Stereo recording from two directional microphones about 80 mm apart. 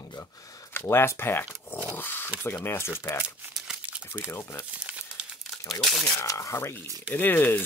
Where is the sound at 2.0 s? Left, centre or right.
Left.